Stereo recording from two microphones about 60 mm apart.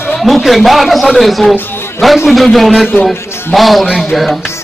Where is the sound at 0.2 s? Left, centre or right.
Centre.